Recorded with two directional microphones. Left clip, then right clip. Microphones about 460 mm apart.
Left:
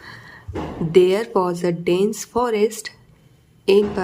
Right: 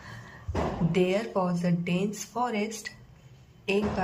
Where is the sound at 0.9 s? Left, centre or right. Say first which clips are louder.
Left 13 dB; centre.